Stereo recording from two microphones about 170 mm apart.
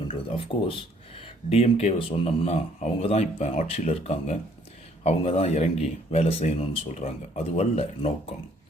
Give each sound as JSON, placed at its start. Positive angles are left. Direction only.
{"t": 0.1, "sound": "speech", "side_deg": 35}